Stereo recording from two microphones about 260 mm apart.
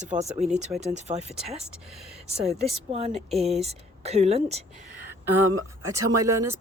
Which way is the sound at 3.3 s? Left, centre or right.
Right.